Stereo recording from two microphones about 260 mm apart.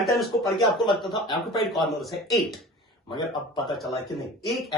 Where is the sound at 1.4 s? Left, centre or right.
Centre.